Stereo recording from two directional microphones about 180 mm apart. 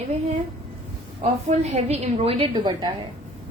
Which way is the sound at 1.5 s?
40° right (ahead or behind).